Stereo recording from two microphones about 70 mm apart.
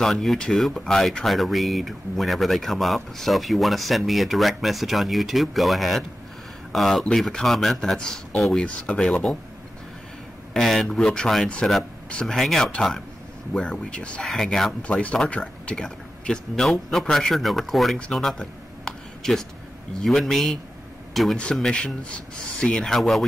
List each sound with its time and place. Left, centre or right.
0.0 s speech: centre
10.5 s speech: centre
12.4 s speech: centre
13.5 s speech: centre
14.8 s speech: centre
18.4 s a sound: centre
20.0 s speech: centre